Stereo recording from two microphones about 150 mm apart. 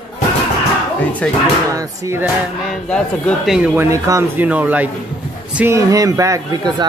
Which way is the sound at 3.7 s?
20° right (ahead or behind).